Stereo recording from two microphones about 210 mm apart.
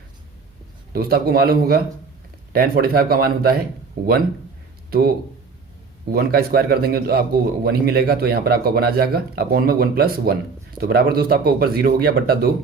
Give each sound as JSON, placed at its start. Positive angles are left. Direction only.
{"t": 0.9, "sound": "a man's voice", "side_deg": -45}
{"t": 6.1, "sound": "a man's voice", "side_deg": -45}